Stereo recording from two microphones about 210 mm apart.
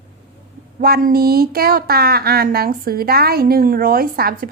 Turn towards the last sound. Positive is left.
turn(degrees=-45)  # may be behind; listen again after turning